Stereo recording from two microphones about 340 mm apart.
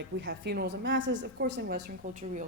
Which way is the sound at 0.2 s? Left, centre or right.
Right.